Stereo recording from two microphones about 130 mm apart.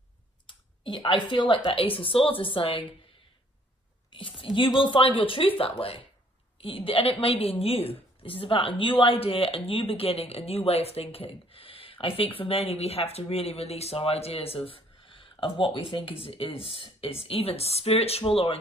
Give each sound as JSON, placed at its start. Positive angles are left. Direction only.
{"t": 0.5, "sound": "speech", "side_deg": 40}
{"t": 4.1, "sound": "speech", "side_deg": 40}